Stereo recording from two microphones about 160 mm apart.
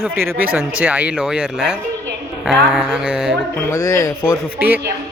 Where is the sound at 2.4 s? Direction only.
Centre (ahead or behind).